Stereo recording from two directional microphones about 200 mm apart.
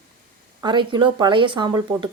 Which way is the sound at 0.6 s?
25° right (ahead or behind).